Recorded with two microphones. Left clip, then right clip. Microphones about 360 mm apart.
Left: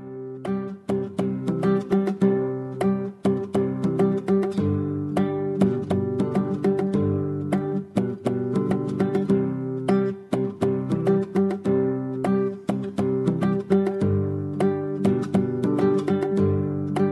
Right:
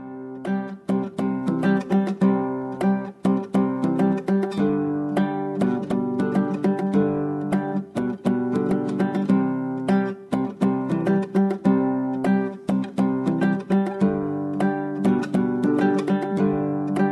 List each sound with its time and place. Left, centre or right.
1.4 s music: right
5.6 s music: right